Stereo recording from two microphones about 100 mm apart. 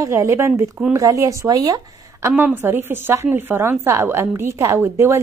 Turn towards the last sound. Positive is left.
turn(degrees=-30)  # may be behind; listen again after turning